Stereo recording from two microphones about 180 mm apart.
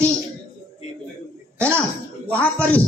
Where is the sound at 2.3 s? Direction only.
10° left (ahead or behind).